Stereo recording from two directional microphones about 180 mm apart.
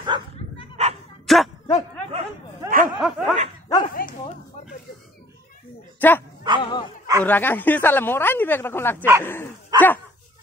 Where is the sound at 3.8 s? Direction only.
50° left (ahead or behind).